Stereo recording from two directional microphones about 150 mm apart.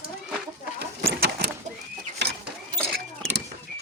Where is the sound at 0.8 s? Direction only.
90° right.